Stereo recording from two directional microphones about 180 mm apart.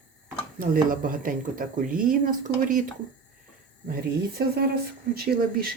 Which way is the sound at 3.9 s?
55° right (ahead or behind).